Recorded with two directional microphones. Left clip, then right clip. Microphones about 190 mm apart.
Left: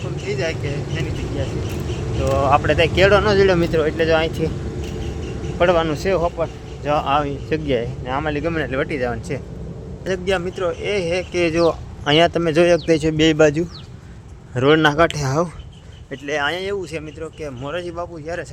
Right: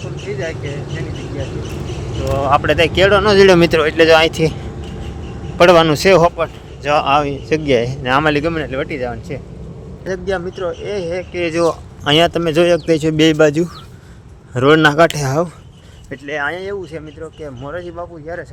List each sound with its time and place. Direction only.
0.3 s speech: centre (ahead or behind)
2.5 s speech: 20° right (ahead or behind)
3.2 s a man's voice: 30° right (ahead or behind)
5.5 s a man's voice: 35° right (ahead or behind)
7.0 s speech: 15° right (ahead or behind)
8.0 s a man's voice: 35° right (ahead or behind)
8.4 s speech: 5° right (ahead or behind)
10.1 s speech: 15° right (ahead or behind)